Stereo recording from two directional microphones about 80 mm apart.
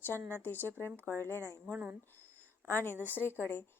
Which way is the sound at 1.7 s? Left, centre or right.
Right.